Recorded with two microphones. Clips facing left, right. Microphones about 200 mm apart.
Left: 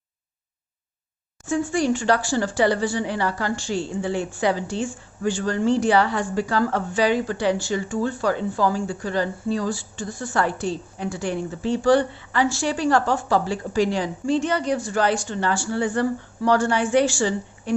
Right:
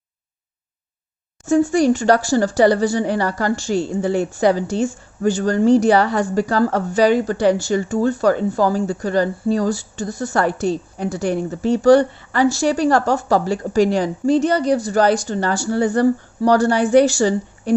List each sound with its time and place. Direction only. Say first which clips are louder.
1.5 s speech: right 7 dB; 40° right (ahead or behind)